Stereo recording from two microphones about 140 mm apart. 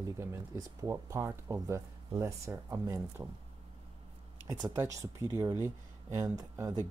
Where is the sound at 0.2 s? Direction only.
20° right (ahead or behind).